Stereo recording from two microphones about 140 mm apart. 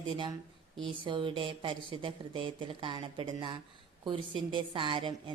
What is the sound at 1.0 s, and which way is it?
A woman's voice, 35° right (ahead or behind).